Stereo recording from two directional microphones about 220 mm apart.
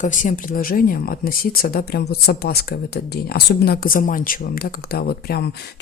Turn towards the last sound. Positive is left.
turn(degrees=45)  # may be behind; listen again after turning